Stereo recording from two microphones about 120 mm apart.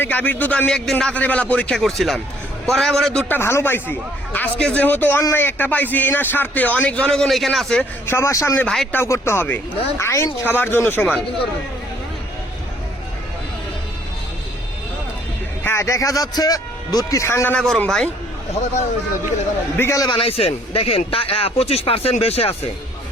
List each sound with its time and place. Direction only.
0.0 s a man's voice: 15° left (ahead or behind)
8.0 s speech: 20° left (ahead or behind)
8.6 s speech: centre (ahead or behind)
8.9 s a man's voice: 20° left (ahead or behind)
15.6 s speech: 20° left (ahead or behind)
17.5 s a man's voice: 10° left (ahead or behind)
19.7 s speech: 20° left (ahead or behind)
20.0 s a man's voice: 40° left (ahead or behind)
20.2 s speech: 55° left (ahead or behind)